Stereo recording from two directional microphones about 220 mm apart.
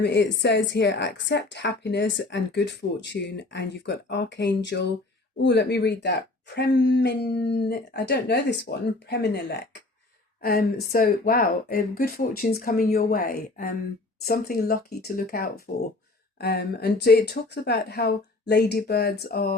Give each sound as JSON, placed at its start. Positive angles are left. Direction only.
{"t": 0.0, "sound": "a woman's voice", "side_deg": 50}